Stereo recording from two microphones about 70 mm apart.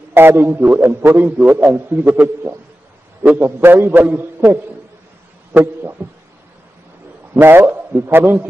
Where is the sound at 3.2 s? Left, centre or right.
Right.